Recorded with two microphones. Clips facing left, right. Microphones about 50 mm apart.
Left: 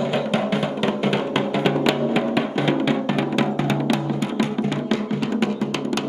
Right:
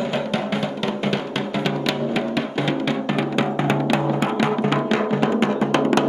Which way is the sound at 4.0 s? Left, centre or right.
Right.